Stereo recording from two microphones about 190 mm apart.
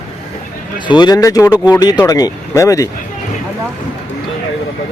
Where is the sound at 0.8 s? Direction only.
25° left (ahead or behind).